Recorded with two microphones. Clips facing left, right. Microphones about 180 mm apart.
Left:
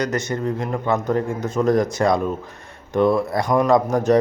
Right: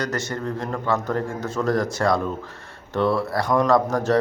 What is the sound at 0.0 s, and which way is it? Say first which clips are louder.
A man's voice: left 4 dB; 20° left (ahead or behind).